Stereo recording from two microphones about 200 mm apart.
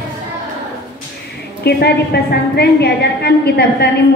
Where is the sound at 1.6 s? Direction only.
55° left (ahead or behind).